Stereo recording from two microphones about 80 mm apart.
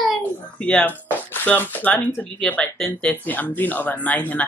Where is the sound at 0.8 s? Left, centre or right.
Left; by 3.1 s centre.